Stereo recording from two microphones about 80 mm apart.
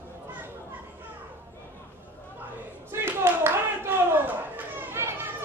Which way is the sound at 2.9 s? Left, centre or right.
Right.